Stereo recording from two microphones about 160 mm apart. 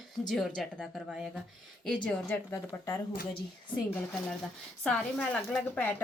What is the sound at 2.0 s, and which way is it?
A woman's voice, 10° left (ahead or behind).